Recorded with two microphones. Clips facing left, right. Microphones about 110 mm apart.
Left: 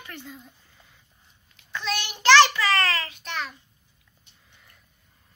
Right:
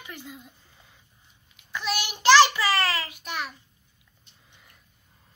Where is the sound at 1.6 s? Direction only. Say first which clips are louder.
Even; 10° right (ahead or behind).